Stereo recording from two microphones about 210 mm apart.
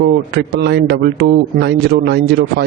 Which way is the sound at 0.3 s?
50° right (ahead or behind).